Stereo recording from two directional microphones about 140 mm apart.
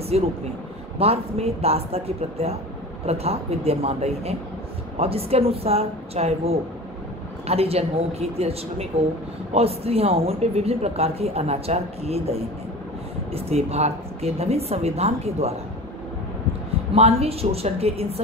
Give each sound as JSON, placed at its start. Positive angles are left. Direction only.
{"t": 0.1, "sound": "speech", "side_deg": -50}
{"t": 16.9, "sound": "speech", "side_deg": -45}